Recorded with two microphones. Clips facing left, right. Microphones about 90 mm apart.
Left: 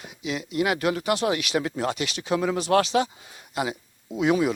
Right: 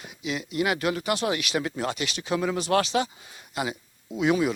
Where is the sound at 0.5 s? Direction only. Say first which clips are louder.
Left 2 dB; 85° left.